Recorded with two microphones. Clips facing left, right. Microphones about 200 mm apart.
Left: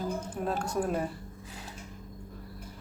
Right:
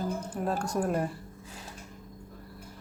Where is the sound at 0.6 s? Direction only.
5° left (ahead or behind).